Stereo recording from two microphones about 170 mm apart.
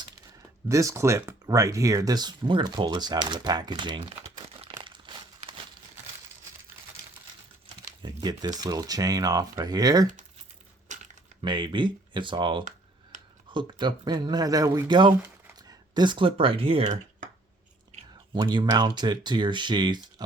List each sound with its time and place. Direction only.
0.7 s speech: 20° right (ahead or behind)
8.0 s speech: 25° right (ahead or behind)
10.8 s a sound: 45° right (ahead or behind)
11.4 s speech: 25° right (ahead or behind)
17.9 s a sound: 40° right (ahead or behind)
18.3 s speech: 25° right (ahead or behind)